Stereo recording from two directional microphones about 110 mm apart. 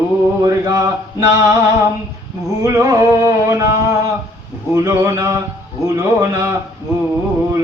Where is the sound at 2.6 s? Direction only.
30° right (ahead or behind).